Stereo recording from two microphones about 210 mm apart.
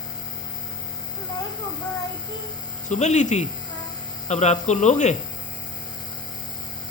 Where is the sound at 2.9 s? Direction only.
35° left (ahead or behind).